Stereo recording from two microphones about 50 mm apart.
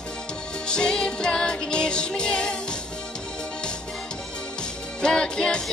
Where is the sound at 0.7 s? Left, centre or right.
Centre.